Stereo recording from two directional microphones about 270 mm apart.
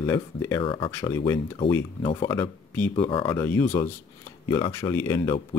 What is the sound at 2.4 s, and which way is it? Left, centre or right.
Speech, centre.